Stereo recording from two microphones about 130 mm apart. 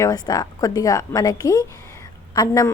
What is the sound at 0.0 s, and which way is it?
A woman's voice, 30° left (ahead or behind).